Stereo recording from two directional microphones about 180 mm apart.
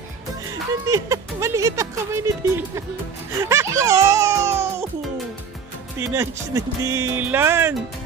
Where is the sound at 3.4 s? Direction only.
15° right (ahead or behind).